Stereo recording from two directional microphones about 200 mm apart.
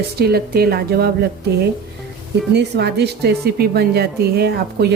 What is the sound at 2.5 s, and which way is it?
Speech, 55° right (ahead or behind).